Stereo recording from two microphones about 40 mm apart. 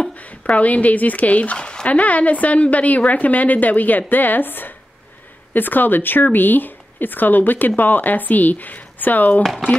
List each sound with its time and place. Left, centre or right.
0.5 s speech: left
1.6 s speech: left
1.9 s speech: left